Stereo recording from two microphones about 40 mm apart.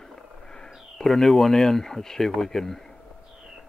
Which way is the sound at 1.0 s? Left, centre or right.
Centre.